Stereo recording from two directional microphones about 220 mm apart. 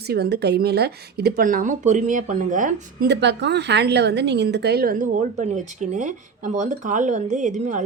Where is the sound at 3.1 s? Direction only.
50° right (ahead or behind).